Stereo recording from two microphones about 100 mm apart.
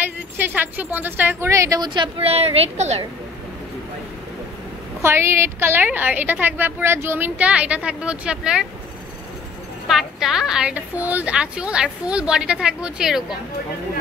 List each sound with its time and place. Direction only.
0.4 s speech: 20° right (ahead or behind)
2.1 s a woman's voice: 90° right
5.0 s a woman's voice: 25° right (ahead or behind); by 8.6 s 10° right (ahead or behind)
9.8 s a woman's voice: 5° right (ahead or behind)